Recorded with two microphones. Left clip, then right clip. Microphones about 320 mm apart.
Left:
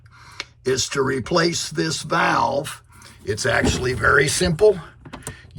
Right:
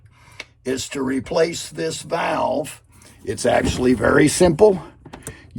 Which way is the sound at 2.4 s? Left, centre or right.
Left.